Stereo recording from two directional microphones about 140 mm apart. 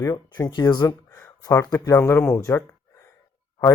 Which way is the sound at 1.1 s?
15° left (ahead or behind).